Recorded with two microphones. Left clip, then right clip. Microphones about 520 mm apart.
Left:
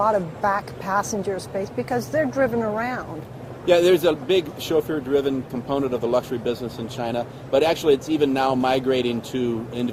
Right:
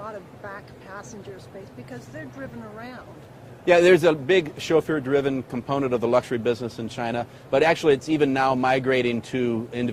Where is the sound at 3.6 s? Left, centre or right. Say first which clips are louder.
Right 1 dB; right.